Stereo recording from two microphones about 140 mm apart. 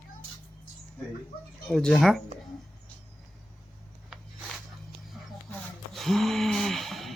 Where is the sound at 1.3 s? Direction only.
90° left.